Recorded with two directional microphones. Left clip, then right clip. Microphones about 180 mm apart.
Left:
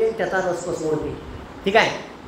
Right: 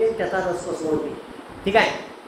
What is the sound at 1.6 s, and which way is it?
Speech, 15° left (ahead or behind).